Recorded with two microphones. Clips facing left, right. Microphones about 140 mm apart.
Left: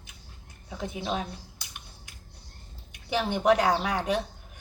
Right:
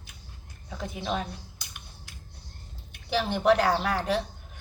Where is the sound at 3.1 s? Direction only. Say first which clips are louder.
Even; 15° left (ahead or behind).